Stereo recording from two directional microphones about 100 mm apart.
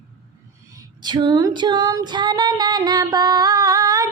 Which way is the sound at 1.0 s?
45° right (ahead or behind).